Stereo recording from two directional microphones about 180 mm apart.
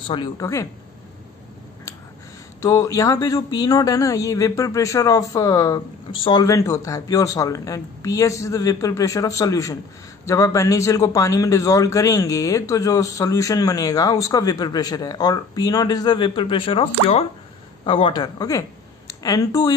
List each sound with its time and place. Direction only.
0.1 s speech: 20° left (ahead or behind)
2.6 s a man's voice: 20° left (ahead or behind)